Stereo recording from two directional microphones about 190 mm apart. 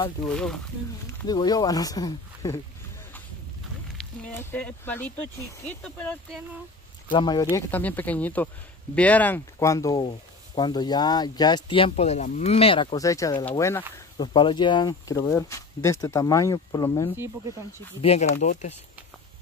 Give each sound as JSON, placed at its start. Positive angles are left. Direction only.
{"t": 1.2, "sound": "speech", "side_deg": 20}
{"t": 4.0, "sound": "speech", "side_deg": 10}
{"t": 7.1, "sound": "speech", "side_deg": 25}
{"t": 7.5, "sound": "speech", "side_deg": 10}
{"t": 13.9, "sound": "speech", "side_deg": 20}
{"t": 18.0, "sound": "speech", "side_deg": 35}